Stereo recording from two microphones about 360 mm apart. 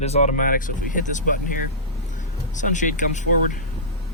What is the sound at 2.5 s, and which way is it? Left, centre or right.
Speech, left.